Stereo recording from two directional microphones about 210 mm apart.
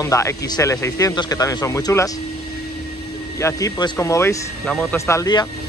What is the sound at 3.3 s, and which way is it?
Speech, 15° left (ahead or behind).